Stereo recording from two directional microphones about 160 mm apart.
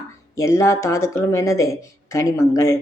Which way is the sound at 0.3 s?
15° left (ahead or behind).